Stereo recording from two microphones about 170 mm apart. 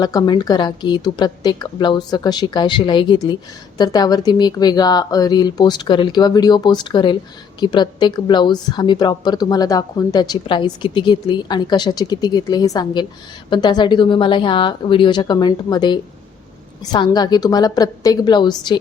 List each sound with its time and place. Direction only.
0.0 s a woman's voice: 25° left (ahead or behind)